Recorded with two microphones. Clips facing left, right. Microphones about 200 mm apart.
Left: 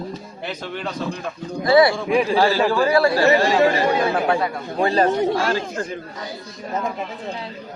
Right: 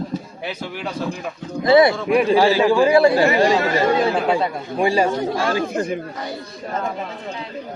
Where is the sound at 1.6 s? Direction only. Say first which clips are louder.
Right 1 dB; 20° right (ahead or behind).